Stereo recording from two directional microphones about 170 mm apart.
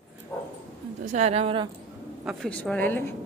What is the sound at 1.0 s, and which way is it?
Speech, 40° right (ahead or behind).